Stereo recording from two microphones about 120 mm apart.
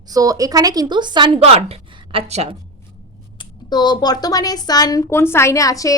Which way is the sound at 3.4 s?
35° left (ahead or behind).